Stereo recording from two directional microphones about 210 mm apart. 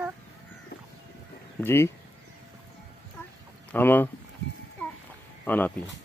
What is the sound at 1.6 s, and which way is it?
Speech, 10° left (ahead or behind).